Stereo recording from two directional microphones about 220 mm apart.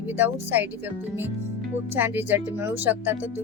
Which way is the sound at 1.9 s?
10° right (ahead or behind).